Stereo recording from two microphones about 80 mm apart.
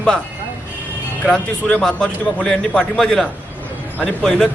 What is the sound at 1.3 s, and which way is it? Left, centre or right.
A man's voice, centre.